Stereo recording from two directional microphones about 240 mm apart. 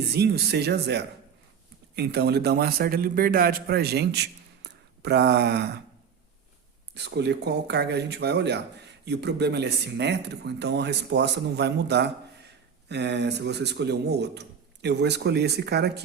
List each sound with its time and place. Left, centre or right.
0.1 s speech: right
6.9 s speech: right